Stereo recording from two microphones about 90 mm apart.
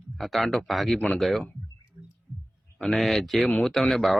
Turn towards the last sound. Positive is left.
turn(degrees=0)  # may be behind; listen again after turning